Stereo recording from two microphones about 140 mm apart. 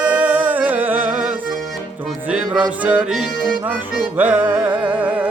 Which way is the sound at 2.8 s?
10° right (ahead or behind).